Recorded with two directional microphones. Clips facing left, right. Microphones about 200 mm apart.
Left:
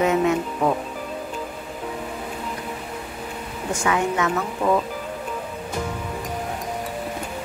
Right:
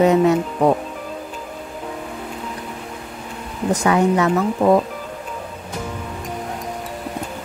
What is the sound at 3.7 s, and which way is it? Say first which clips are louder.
Speech: right 6 dB; 35° right (ahead or behind).